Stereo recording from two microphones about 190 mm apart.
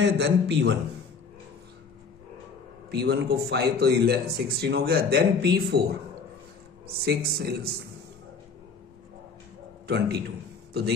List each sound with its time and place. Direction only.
0.0 s a man's voice: 65° right (ahead or behind)
2.9 s a man's voice: 60° right (ahead or behind)
6.9 s a man's voice: 55° right (ahead or behind)
9.8 s a man's voice: 60° right (ahead or behind)